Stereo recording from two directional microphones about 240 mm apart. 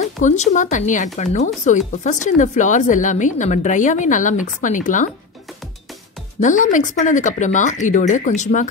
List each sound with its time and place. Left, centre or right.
0.0 s speech: left
6.4 s speech: left